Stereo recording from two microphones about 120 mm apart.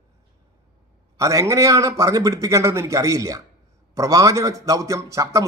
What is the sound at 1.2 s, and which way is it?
A man's voice, 25° right (ahead or behind).